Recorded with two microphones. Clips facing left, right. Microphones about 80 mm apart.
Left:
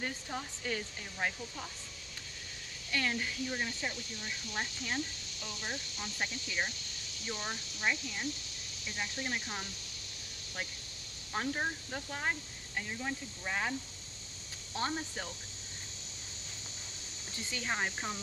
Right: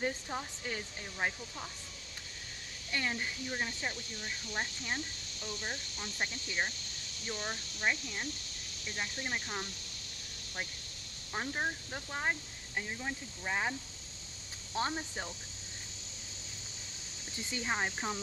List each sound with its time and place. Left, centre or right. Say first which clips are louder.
0.0 s speech: right 3 dB; centre
2.9 s speech: left 1 dB; right
6.1 s speech: right 1 dB; centre
7.8 s speech: even; centre
11.3 s speech: left 1 dB; centre
14.8 s speech: right 1 dB; centre
17.6 s speech: right 1 dB; centre